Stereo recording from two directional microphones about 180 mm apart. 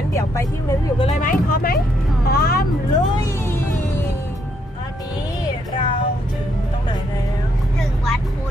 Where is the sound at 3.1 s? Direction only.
15° left (ahead or behind).